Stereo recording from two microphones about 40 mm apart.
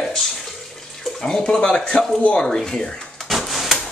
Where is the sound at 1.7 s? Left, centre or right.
Left.